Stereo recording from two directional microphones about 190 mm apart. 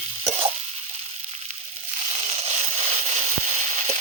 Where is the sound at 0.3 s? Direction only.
30° right (ahead or behind).